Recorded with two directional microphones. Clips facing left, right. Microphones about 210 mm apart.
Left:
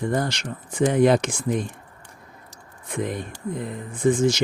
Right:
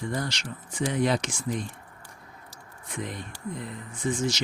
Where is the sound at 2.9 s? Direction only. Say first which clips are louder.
Left 8 dB; 55° left (ahead or behind).